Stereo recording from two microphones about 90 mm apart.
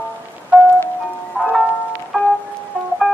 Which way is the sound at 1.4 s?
15° right (ahead or behind).